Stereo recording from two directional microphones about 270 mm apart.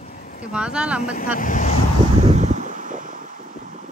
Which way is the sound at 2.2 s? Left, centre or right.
Right.